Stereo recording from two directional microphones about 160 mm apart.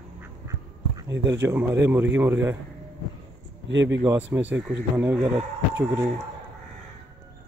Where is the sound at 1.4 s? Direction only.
10° right (ahead or behind).